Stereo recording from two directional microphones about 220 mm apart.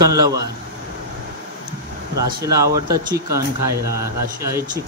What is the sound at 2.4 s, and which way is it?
Speech, 15° right (ahead or behind).